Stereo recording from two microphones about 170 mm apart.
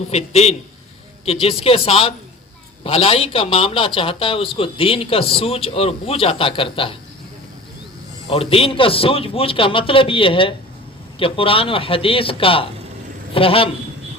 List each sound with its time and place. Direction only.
0.1 s a man's voice: 40° left (ahead or behind)
8.3 s a man's voice: 35° left (ahead or behind)